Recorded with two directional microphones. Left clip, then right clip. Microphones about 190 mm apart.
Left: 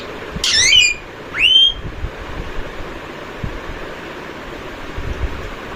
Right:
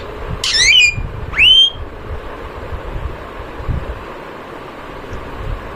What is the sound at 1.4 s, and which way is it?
Whistling, 30° right (ahead or behind).